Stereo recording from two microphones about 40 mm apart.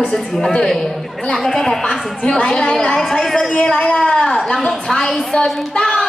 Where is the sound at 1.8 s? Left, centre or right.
Left.